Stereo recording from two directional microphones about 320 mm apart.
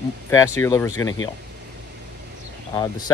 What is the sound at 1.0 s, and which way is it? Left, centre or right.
Speech, left.